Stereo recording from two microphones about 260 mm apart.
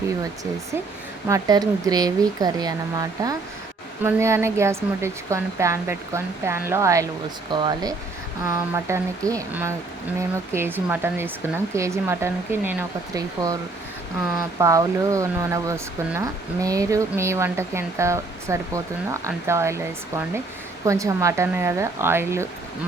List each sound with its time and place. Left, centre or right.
1.3 s speech: centre
14.6 s speech: centre
20.8 s speech: centre